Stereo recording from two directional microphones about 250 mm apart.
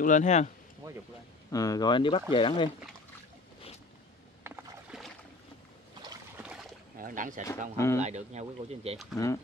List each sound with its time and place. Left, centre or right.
0.0 s speech: left
1.5 s speech: centre
4.4 s rowboat: centre
6.0 s boat: centre
7.0 s speech: right
7.7 s speech: centre
8.0 s speech: right
9.1 s speech: centre